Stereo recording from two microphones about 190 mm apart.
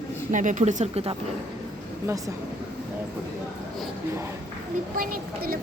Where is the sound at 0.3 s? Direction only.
40° right (ahead or behind).